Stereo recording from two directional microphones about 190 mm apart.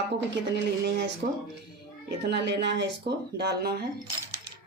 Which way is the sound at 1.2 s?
50° right (ahead or behind).